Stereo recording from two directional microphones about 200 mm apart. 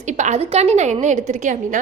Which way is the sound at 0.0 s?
35° right (ahead or behind).